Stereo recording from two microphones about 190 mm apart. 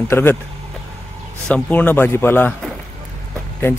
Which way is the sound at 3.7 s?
10° left (ahead or behind).